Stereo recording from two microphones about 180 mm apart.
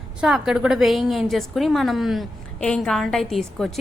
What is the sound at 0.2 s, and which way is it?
A woman's voice, 5° right (ahead or behind).